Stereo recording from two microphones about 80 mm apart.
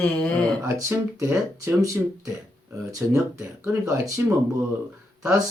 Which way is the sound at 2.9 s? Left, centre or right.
Right.